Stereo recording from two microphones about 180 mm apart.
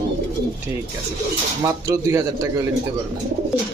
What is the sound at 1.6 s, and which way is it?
Speech, 20° right (ahead or behind).